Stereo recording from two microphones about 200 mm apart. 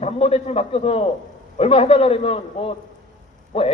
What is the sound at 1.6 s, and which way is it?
A man's voice, 30° left (ahead or behind).